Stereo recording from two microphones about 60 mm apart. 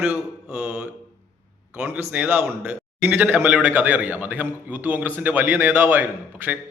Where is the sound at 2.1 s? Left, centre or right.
Right.